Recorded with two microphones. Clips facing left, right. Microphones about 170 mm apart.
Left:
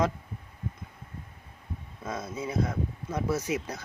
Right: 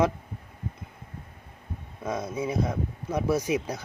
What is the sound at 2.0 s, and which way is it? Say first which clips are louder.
Speech: right 5 dB; 10° right (ahead or behind).